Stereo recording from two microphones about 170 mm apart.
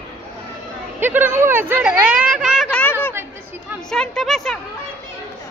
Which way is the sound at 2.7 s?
10° left (ahead or behind).